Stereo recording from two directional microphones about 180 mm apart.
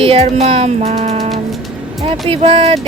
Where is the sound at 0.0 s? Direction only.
35° right (ahead or behind).